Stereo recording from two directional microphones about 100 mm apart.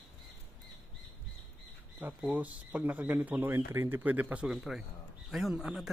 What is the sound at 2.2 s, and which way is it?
Speech, 15° right (ahead or behind).